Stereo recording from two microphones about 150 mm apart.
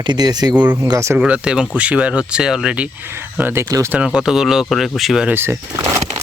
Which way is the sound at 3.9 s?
5° right (ahead or behind).